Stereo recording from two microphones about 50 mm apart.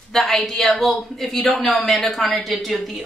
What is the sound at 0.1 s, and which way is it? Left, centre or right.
A man's voice, centre.